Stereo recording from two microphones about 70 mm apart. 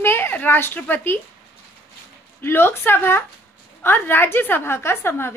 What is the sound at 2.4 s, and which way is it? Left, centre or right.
A woman's voice, left.